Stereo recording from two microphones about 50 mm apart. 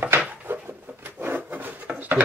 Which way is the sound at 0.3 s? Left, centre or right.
Right.